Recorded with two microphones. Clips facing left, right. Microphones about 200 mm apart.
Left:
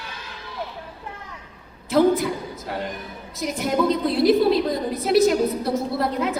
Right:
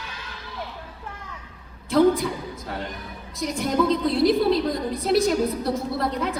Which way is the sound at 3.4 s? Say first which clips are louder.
Left 1 dB; 5° left (ahead or behind).